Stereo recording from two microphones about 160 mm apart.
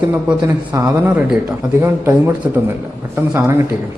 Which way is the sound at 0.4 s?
15° right (ahead or behind).